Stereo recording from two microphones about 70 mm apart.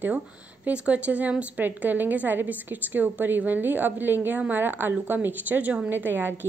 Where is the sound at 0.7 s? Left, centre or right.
Centre.